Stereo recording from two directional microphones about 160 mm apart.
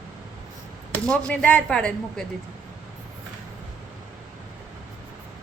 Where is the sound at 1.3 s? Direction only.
10° left (ahead or behind).